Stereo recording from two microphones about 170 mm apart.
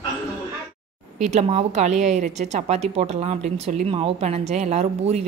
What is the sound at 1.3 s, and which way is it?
A woman's voice, 40° right (ahead or behind).